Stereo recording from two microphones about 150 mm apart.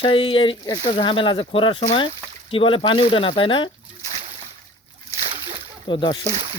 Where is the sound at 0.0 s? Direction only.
35° left (ahead or behind).